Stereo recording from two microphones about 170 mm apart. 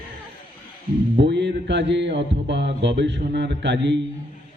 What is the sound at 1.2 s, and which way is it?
Speech, 90° right.